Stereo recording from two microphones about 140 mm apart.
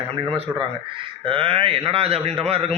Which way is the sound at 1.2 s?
40° right (ahead or behind).